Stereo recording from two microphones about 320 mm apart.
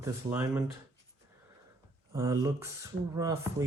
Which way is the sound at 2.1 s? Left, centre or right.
Centre.